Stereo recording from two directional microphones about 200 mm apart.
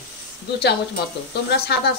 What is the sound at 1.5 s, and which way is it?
Speech, 50° left (ahead or behind).